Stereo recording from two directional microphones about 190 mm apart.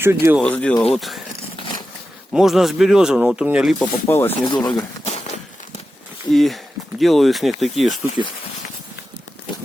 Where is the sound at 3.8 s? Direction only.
10° left (ahead or behind).